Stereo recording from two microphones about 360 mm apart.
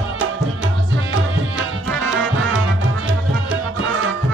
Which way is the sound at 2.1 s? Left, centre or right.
Right.